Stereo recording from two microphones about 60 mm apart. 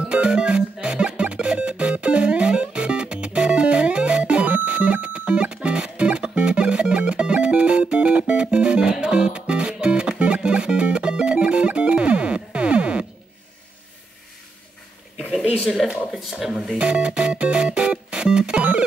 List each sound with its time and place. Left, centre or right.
0.1 s music: centre
15.8 s a sound: centre
16.7 s music: centre